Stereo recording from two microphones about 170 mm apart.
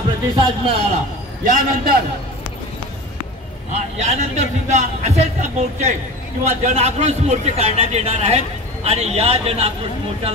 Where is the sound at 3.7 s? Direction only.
40° right (ahead or behind).